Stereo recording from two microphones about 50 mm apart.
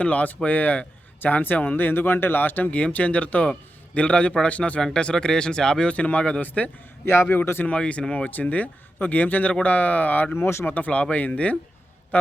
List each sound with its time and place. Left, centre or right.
0.0 s a man's voice: left
4.9 s speech: centre
5.9 s a man's voice: left
7.0 s a man's voice: left
7.8 s a man's voice: left
10.3 s speech: left
10.7 s a man's voice: left